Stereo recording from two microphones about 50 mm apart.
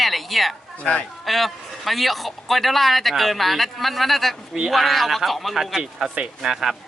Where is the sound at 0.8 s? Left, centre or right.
Left.